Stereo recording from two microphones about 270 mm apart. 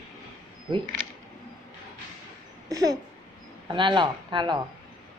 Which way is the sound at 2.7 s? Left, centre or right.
Centre.